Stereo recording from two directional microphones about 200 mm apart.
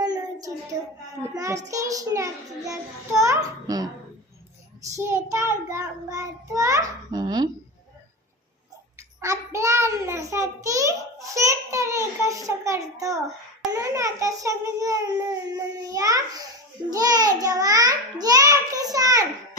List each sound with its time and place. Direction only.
0.0 s child singing: 20° right (ahead or behind)
4.9 s child singing: 15° right (ahead or behind)
9.2 s child singing: 15° right (ahead or behind)
16.9 s a child's voice: 20° right (ahead or behind)